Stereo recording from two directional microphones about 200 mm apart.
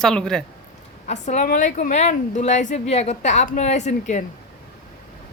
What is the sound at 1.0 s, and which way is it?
A woman's voice, 35° left (ahead or behind).